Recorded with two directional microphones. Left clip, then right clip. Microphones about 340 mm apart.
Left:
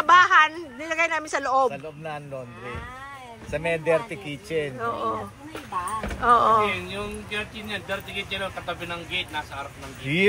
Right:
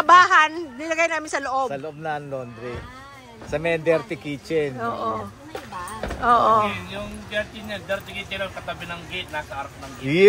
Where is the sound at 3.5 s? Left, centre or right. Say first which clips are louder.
Right 2 dB; right.